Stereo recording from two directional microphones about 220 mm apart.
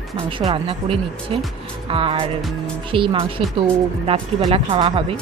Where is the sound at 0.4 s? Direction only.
25° right (ahead or behind).